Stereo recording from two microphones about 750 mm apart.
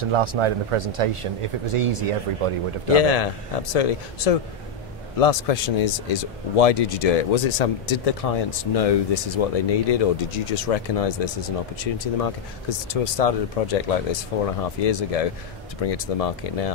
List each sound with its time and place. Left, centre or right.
0.0 s speech: right
2.9 s speech: left